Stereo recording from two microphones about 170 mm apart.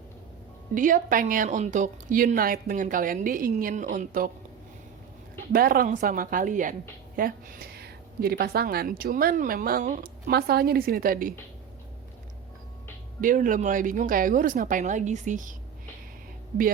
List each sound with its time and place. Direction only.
0.7 s a woman's voice: 50° right (ahead or behind)
5.5 s a woman's voice: 60° right (ahead or behind)
13.2 s a woman's voice: 50° right (ahead or behind)